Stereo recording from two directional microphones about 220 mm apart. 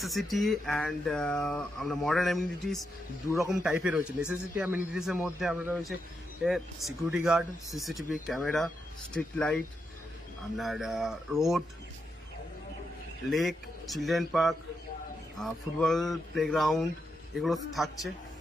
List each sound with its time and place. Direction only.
0.0 s speech: centre (ahead or behind)
10.6 s speech: centre (ahead or behind)
13.3 s speech: centre (ahead or behind)